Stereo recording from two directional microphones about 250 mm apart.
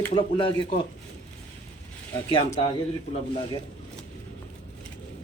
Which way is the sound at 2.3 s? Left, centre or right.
Left.